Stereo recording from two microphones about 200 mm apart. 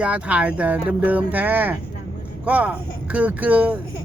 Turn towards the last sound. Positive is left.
turn(degrees=-5)  # may be behind; listen again after turning